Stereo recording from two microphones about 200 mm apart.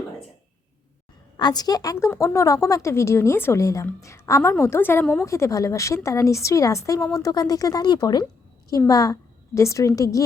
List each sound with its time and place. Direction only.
1.4 s a woman's voice: 20° left (ahead or behind)